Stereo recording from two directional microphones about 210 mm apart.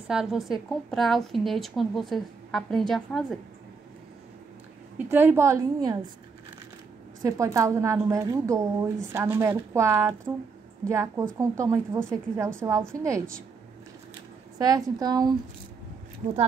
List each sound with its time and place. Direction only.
0.1 s a woman's voice: centre (ahead or behind)
4.9 s a woman's voice: 10° right (ahead or behind)
7.2 s a woman's voice: 15° right (ahead or behind)
14.6 s a woman's voice: 15° right (ahead or behind)